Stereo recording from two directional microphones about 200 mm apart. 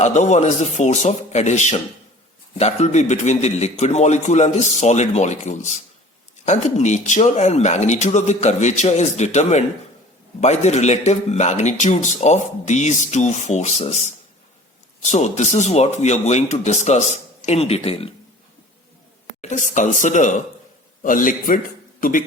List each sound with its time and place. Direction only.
0.0 s speech: 35° left (ahead or behind)
19.4 s a man's voice: 35° left (ahead or behind)